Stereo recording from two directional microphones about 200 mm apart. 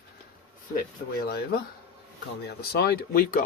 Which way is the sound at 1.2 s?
50° left (ahead or behind).